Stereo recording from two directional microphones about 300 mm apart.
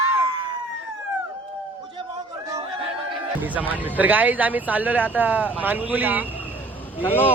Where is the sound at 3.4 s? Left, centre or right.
Centre.